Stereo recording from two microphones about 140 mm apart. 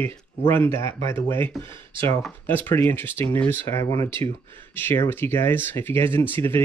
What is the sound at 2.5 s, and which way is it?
Speech, 15° left (ahead or behind).